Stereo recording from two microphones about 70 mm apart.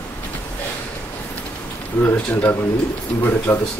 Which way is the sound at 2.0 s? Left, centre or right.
Left.